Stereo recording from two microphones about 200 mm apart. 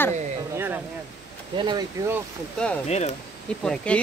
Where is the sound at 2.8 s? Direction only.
35° left (ahead or behind).